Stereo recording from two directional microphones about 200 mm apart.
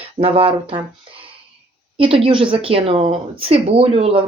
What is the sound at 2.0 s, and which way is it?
Speech, 30° right (ahead or behind).